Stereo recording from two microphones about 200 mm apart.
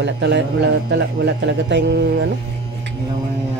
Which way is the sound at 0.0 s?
60° right (ahead or behind).